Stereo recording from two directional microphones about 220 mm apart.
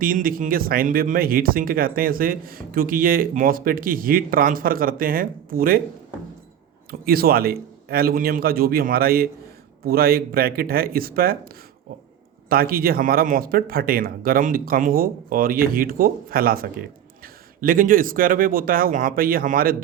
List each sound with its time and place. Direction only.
0.0 s speech: 40° right (ahead or behind)
7.0 s a man's voice: 45° right (ahead or behind)
12.5 s speech: 40° right (ahead or behind)